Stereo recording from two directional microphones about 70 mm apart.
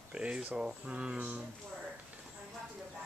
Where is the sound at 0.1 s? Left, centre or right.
Centre.